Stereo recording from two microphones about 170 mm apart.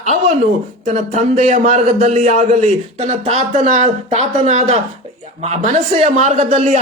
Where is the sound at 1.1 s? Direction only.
50° right (ahead or behind).